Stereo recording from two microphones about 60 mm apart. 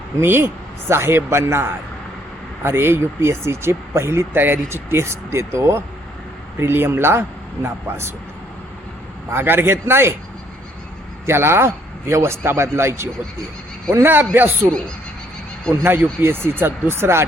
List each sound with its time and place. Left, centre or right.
0.2 s speech: right
6.6 s speech: right
9.3 s speech: right
11.3 s speech: right
16.2 s speech: right